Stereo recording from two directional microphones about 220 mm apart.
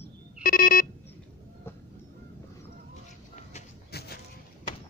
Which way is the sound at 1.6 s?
10° left (ahead or behind).